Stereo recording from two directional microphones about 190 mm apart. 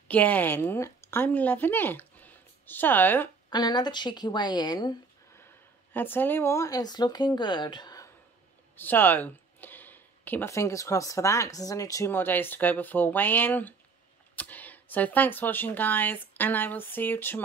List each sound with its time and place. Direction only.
0.1 s a woman's voice: 10° left (ahead or behind)
3.4 s speech: 20° left (ahead or behind)
8.7 s speech: 10° left (ahead or behind)